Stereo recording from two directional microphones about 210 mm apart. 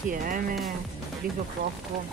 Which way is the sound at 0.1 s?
40° right (ahead or behind).